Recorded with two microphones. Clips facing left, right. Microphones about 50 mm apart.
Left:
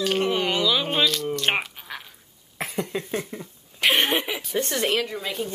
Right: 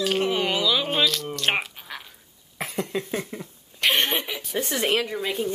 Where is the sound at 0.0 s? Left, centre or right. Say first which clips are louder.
Even; centre.